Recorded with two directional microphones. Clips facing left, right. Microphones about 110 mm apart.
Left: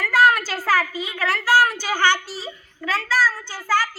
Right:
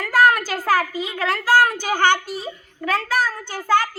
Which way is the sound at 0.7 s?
45° right (ahead or behind).